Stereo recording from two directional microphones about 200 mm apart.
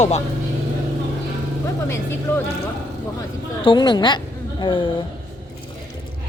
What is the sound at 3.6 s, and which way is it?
A woman's voice, 25° left (ahead or behind).